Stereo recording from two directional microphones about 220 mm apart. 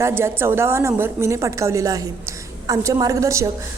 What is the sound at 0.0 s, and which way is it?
A woman's voice, 10° right (ahead or behind).